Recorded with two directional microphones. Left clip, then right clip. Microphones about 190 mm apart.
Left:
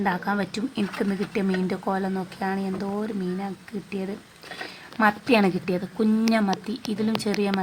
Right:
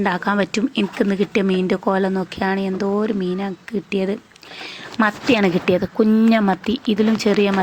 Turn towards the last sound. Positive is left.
turn(degrees=-30)  # may be behind; listen again after turning